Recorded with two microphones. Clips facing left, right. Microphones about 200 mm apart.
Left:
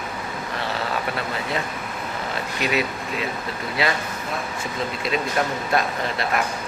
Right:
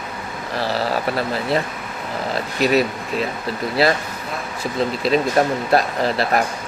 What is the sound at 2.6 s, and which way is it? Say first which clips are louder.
Speech: right 7 dB; 40° right (ahead or behind).